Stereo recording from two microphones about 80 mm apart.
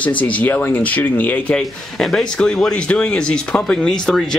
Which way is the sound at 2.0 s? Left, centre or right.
Centre.